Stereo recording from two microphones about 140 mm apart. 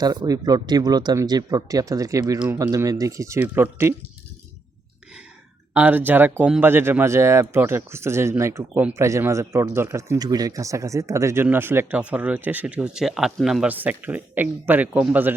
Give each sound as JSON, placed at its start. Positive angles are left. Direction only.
{"t": 0.0, "sound": "a man's voice", "side_deg": -30}
{"t": 5.7, "sound": "a man's voice", "side_deg": -10}